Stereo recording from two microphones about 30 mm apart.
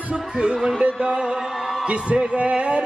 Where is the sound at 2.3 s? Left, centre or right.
Right.